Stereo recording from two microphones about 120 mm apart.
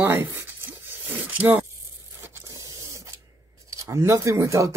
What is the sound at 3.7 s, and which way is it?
Speech, 25° right (ahead or behind).